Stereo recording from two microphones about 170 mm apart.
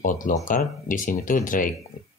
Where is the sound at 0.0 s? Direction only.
50° left (ahead or behind).